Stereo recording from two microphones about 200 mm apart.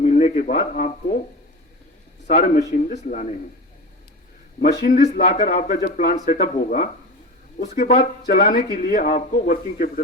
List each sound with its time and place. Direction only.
0.0 s a sound: 35° left (ahead or behind)
2.2 s speech: 35° left (ahead or behind)
4.9 s a man's voice: 40° left (ahead or behind)